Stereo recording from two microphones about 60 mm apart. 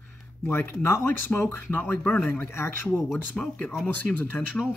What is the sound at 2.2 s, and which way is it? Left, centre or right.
Speech, left.